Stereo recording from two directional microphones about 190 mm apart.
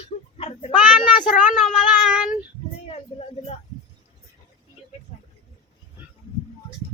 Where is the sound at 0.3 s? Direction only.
35° left (ahead or behind).